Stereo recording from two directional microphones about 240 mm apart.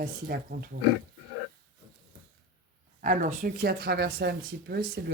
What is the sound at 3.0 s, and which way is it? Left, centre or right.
Speech, right.